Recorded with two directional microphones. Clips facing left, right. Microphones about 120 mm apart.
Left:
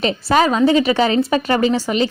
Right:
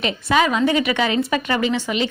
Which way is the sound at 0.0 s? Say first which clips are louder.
Left 3 dB; 35° left (ahead or behind).